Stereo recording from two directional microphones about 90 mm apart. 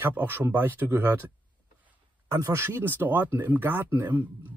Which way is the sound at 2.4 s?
30° right (ahead or behind).